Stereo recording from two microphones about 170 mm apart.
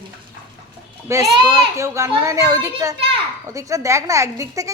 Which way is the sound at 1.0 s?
15° right (ahead or behind).